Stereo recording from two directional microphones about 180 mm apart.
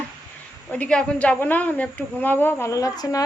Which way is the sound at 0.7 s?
5° left (ahead or behind).